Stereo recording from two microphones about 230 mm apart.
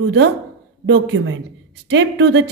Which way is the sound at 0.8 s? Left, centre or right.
Right.